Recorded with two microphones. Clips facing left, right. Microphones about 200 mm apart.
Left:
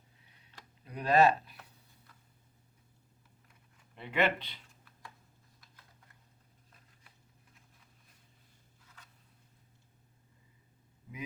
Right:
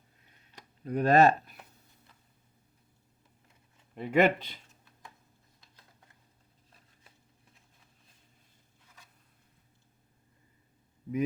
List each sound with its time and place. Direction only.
0.9 s speech: 50° right (ahead or behind)
3.9 s speech: 45° right (ahead or behind)
4.7 s computer keyboard: 20° right (ahead or behind)